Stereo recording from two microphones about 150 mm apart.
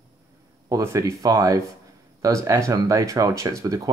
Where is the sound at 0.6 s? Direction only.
20° right (ahead or behind).